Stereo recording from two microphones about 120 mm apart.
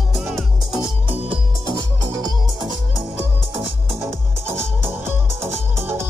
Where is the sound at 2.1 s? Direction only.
35° right (ahead or behind).